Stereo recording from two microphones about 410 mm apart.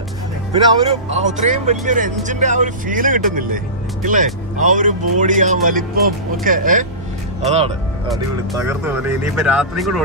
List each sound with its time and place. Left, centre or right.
0.5 s speech: centre